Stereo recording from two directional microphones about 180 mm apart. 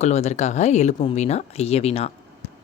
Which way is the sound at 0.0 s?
40° left (ahead or behind).